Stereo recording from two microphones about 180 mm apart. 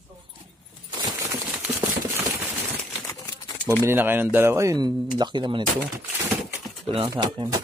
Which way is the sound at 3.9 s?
10° right (ahead or behind).